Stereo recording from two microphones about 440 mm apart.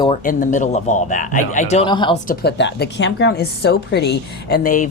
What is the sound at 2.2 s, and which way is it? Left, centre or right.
A woman's voice, left.